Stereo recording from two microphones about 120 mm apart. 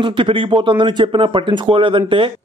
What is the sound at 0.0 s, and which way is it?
A man's voice, 45° right (ahead or behind).